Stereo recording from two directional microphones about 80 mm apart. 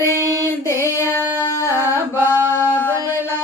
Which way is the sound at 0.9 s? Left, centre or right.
Left.